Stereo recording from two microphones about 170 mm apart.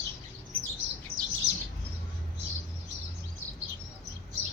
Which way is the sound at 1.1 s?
60° right (ahead or behind).